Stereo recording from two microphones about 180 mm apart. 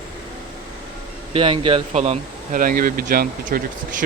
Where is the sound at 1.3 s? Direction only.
25° right (ahead or behind).